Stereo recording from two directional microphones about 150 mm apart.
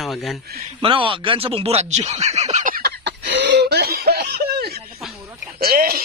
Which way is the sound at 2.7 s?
90° right.